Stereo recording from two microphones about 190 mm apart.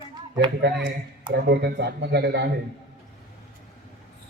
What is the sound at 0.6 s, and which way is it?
Speech, 65° right (ahead or behind).